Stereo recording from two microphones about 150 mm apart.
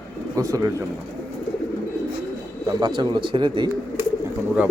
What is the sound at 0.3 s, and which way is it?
Speech, 20° right (ahead or behind).